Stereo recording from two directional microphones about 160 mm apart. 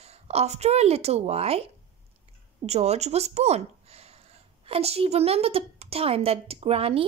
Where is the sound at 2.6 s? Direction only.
40° right (ahead or behind).